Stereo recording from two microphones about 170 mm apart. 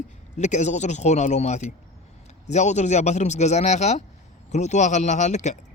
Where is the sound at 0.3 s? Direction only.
45° left (ahead or behind).